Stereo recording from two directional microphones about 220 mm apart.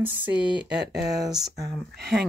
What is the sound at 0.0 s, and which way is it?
Speech, 10° right (ahead or behind).